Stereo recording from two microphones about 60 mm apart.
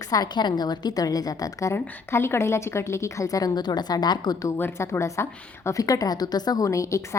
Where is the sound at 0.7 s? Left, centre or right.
Left.